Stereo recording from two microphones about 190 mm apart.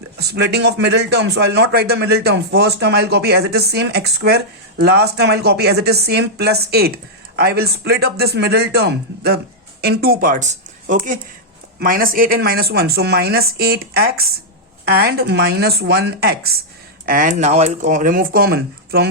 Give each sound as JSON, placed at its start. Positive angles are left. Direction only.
{"t": 0.2, "sound": "a man's voice", "side_deg": -60}
{"t": 17.1, "sound": "speech", "side_deg": -45}